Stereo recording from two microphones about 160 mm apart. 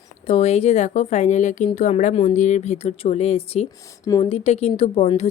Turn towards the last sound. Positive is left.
turn(degrees=40)  # may be behind; listen again after turning